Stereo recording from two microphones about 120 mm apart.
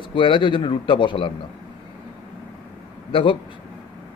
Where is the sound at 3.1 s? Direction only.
45° left (ahead or behind).